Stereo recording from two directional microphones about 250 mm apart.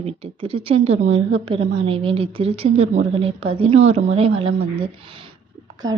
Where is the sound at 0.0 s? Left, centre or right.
Right.